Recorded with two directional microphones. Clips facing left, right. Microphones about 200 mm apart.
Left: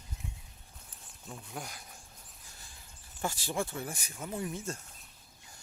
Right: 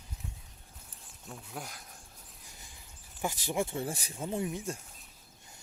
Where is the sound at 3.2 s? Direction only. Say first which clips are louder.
Right 2 dB; 15° right (ahead or behind).